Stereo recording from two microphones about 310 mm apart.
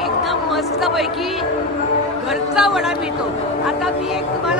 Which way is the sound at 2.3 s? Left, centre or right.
Centre.